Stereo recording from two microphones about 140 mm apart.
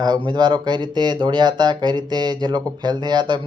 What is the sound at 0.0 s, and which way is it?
A man's voice, 30° right (ahead or behind).